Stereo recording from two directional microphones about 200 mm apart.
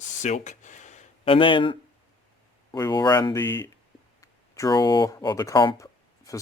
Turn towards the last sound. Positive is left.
turn(degrees=15)  # may be behind; listen again after turning